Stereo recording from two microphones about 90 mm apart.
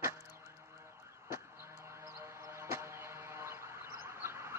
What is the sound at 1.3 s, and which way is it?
Music, 30° right (ahead or behind).